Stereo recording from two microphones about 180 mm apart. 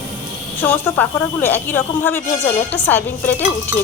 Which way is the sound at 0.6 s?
10° left (ahead or behind).